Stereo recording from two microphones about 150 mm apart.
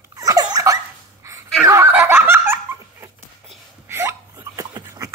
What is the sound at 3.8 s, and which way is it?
Hiccup, 15° right (ahead or behind).